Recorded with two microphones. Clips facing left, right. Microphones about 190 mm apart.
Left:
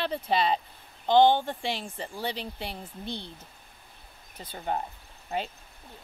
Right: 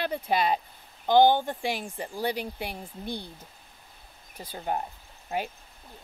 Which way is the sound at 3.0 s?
25° left (ahead or behind).